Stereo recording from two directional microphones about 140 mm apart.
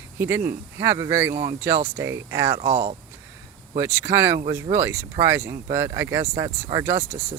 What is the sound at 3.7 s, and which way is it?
Speech, 20° right (ahead or behind).